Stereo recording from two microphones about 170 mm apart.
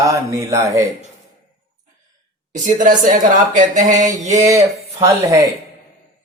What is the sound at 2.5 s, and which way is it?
Speech, 55° right (ahead or behind).